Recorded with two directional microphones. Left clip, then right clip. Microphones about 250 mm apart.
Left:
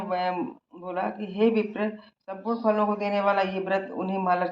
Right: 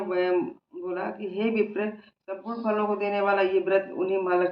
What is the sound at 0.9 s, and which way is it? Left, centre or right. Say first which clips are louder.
Speech: left 1 dB; left.